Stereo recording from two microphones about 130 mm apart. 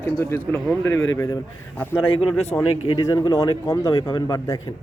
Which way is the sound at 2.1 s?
45° left (ahead or behind).